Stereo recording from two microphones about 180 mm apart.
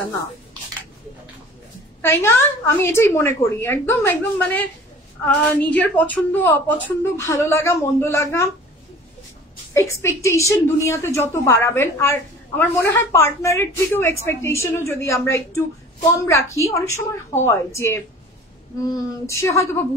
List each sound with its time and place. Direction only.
2.0 s a woman's voice: 15° left (ahead or behind)
5.2 s a woman's voice: 10° left (ahead or behind)
9.8 s a woman's voice: 15° left (ahead or behind)